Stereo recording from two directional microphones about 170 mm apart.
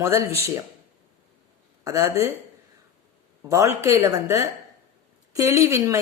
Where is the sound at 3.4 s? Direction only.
15° right (ahead or behind).